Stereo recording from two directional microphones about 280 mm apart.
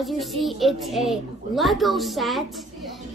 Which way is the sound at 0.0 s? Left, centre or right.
Centre.